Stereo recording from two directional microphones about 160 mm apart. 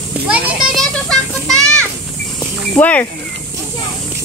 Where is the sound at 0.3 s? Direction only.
5° right (ahead or behind).